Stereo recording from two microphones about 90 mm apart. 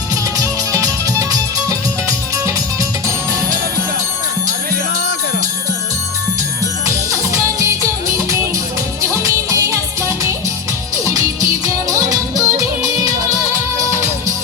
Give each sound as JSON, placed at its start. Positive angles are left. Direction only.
{"t": 0.3, "sound": "music", "side_deg": -40}
{"t": 7.6, "sound": "music", "side_deg": -35}
{"t": 11.0, "sound": "music", "side_deg": -40}